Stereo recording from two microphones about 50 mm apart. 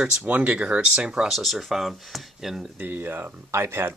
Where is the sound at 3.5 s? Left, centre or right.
Right.